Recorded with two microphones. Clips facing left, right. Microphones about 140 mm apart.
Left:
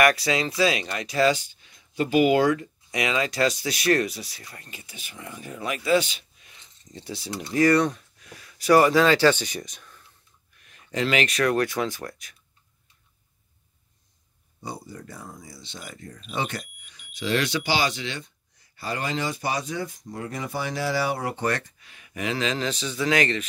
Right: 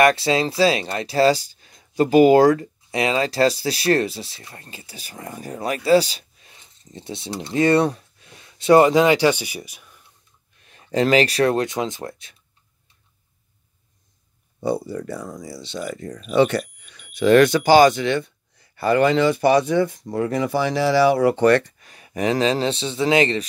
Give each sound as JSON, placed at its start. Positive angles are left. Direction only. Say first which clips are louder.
{"t": 0.0, "sound": "speech", "louder": "right 4 dB", "side_deg": -30}
{"t": 10.6, "sound": "speech", "louder": "right 7 dB", "side_deg": -30}
{"t": 14.6, "sound": "speech", "louder": "right 13 dB", "side_deg": -70}
{"t": 21.7, "sound": "speech", "louder": "right 7 dB", "side_deg": -40}